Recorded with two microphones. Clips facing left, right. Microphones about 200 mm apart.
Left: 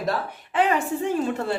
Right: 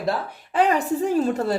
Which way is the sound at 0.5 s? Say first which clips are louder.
Right 2 dB; 40° right (ahead or behind).